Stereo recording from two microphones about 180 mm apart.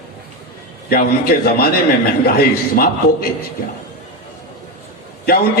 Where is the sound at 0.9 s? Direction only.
55° left (ahead or behind).